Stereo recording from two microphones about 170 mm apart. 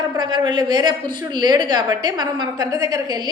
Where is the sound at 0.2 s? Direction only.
25° right (ahead or behind).